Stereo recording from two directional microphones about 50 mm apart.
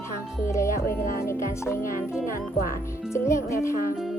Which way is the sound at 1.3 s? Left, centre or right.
Left.